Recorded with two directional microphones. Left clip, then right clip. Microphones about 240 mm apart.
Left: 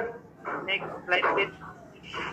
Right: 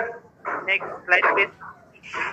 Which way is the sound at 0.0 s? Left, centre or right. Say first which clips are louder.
Right 5 dB; right.